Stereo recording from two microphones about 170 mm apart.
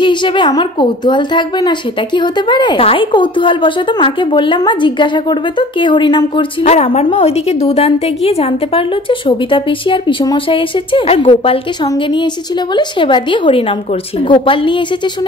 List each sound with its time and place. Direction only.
0.0 s a woman's voice: 25° left (ahead or behind)
6.6 s a woman's voice: 35° left (ahead or behind)